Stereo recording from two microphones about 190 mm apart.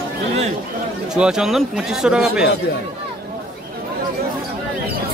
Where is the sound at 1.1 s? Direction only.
5° right (ahead or behind).